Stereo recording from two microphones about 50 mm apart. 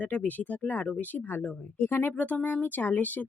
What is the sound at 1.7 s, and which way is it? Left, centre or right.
Speech, left.